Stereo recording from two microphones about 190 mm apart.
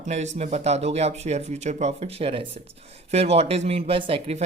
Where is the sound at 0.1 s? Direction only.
35° right (ahead or behind).